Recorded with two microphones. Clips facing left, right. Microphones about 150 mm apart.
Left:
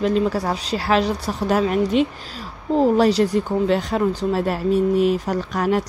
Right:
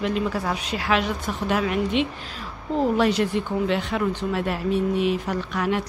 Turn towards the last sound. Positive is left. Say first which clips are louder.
# left 4 dB
turn(degrees=40)  # may be behind; listen again after turning